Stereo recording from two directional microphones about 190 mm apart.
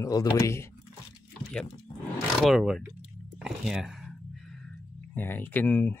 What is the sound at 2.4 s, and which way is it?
Speech, centre (ahead or behind).